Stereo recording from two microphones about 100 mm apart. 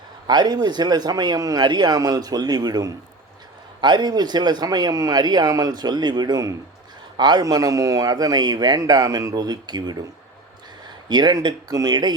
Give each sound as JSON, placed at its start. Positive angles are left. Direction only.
{"t": 0.3, "sound": "a man's voice", "side_deg": -45}
{"t": 11.1, "sound": "speech", "side_deg": -45}